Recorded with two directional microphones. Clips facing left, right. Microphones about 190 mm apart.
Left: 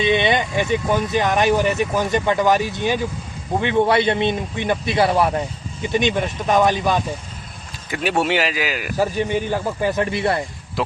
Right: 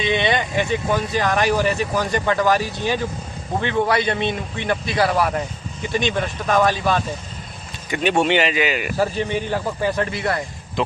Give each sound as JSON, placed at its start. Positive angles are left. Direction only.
{"t": 0.0, "sound": "speech", "side_deg": 20}
{"t": 7.9, "sound": "speech", "side_deg": 5}
{"t": 9.5, "sound": "speech", "side_deg": 15}
{"t": 10.8, "sound": "speech", "side_deg": 0}